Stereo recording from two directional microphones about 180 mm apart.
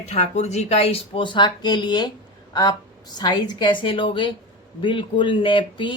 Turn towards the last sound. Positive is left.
turn(degrees=25)  # may be behind; listen again after turning